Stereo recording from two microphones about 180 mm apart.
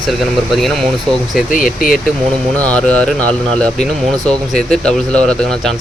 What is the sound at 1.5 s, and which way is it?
Speech, 50° left (ahead or behind).